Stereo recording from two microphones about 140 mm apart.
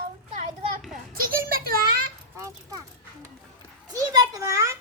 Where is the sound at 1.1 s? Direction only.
90° right.